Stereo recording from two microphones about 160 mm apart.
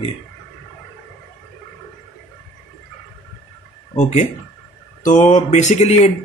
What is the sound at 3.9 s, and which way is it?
Speech, 45° left (ahead or behind).